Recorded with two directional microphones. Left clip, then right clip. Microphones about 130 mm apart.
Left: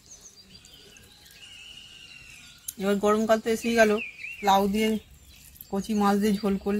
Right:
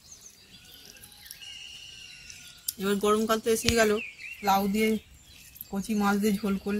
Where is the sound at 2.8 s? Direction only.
30° left (ahead or behind).